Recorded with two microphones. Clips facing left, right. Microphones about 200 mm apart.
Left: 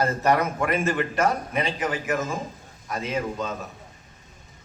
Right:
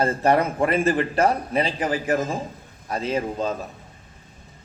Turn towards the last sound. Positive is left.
turn(degrees=-35)  # may be behind; listen again after turning